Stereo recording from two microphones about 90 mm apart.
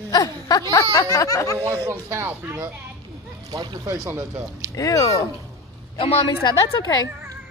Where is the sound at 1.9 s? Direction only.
30° right (ahead or behind).